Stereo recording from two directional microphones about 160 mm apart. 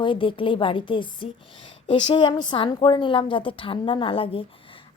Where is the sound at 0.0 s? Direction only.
30° left (ahead or behind).